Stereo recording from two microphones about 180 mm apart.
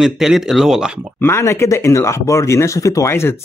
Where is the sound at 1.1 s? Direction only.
15° left (ahead or behind).